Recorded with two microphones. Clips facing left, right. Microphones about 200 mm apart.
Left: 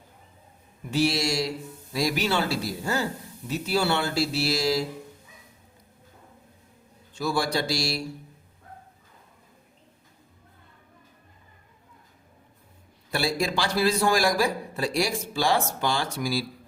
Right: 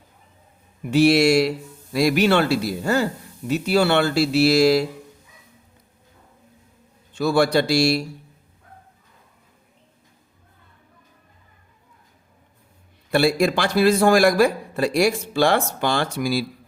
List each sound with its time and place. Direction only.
0.9 s speech: 65° right (ahead or behind)
7.2 s a man's voice: 65° right (ahead or behind)
13.1 s a man's voice: 60° right (ahead or behind)